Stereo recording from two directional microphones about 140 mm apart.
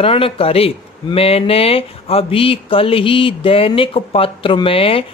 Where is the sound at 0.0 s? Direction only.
40° left (ahead or behind).